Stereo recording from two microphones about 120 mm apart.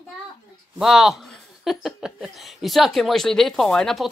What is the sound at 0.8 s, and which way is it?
A man's voice, 5° right (ahead or behind).